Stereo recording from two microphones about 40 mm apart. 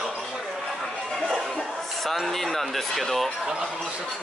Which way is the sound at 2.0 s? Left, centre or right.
Centre.